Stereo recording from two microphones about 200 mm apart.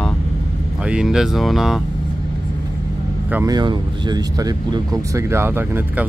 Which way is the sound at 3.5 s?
20° right (ahead or behind).